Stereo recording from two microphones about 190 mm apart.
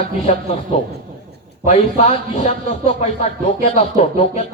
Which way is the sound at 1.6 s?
35° left (ahead or behind).